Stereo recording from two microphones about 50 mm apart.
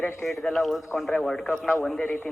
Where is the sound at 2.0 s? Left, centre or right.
Left.